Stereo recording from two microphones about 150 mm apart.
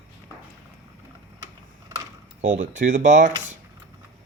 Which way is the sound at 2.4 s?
55° right (ahead or behind).